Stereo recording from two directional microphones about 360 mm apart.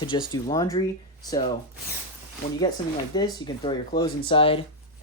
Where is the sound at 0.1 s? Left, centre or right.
Centre.